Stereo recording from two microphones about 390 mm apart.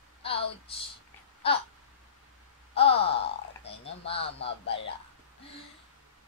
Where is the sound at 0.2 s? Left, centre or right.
Centre.